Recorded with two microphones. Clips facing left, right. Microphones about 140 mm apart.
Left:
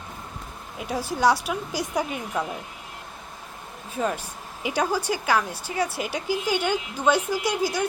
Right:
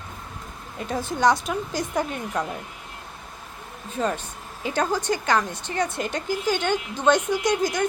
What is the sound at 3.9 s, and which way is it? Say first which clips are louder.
A woman's voice: right 1 dB; 5° left (ahead or behind).